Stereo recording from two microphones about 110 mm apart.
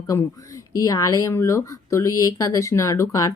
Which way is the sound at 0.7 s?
30° left (ahead or behind).